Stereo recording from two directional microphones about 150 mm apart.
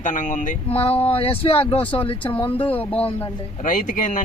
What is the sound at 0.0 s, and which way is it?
Speech, 60° left (ahead or behind).